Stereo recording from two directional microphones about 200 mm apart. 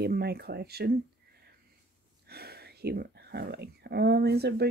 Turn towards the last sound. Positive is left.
turn(degrees=-55)  # may be behind; listen again after turning